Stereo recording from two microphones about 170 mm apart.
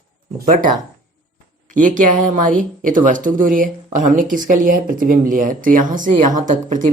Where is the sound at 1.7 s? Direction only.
50° right (ahead or behind).